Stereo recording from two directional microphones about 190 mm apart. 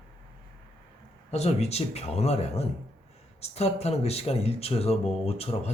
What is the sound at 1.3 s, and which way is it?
Speech, 35° left (ahead or behind).